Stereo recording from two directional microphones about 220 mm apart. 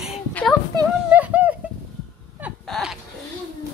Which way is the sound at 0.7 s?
10° right (ahead or behind).